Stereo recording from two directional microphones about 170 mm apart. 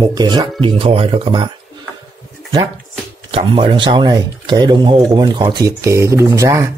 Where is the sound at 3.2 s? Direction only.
30° right (ahead or behind).